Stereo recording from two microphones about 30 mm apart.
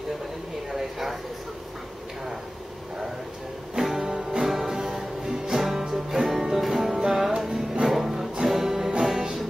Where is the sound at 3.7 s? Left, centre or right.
Centre.